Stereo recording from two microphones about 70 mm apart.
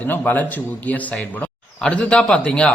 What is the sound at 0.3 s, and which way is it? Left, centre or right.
A man's voice, left.